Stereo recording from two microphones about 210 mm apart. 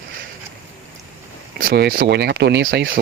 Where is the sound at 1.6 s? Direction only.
45° right (ahead or behind).